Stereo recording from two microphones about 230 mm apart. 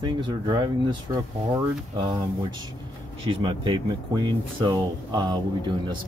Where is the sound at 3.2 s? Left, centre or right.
Right.